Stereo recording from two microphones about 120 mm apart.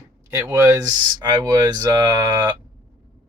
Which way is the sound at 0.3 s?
25° right (ahead or behind).